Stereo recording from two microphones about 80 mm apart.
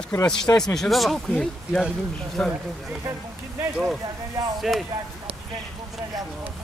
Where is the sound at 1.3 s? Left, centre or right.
Centre.